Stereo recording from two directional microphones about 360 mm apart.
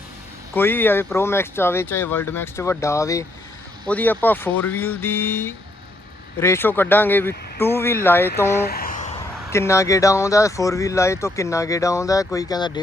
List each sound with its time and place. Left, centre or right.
0.5 s speech: centre
8.6 s a sound: left
9.5 s speech: centre